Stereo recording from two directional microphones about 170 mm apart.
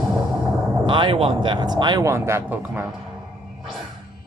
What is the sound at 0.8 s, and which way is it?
Speech, 25° right (ahead or behind).